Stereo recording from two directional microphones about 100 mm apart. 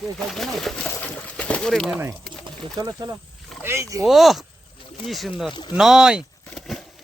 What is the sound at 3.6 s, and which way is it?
Speech, 30° right (ahead or behind).